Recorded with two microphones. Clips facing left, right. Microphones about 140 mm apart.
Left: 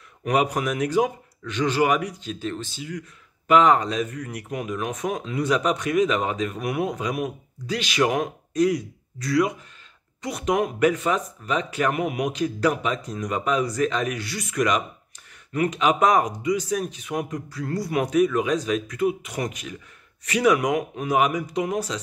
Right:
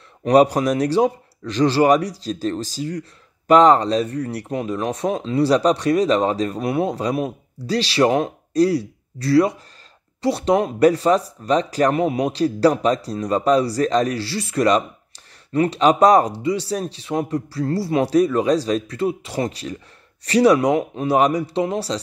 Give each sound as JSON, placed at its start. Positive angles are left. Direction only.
{"t": 0.2, "sound": "speech", "side_deg": -35}